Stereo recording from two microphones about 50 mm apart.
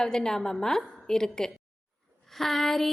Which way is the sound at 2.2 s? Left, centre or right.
Centre.